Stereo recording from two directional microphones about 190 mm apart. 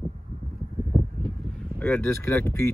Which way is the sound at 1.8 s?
10° left (ahead or behind).